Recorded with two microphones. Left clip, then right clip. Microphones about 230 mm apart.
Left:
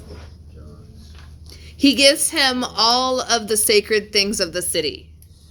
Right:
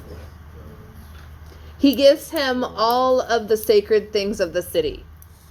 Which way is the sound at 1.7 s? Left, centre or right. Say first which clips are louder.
Even; left.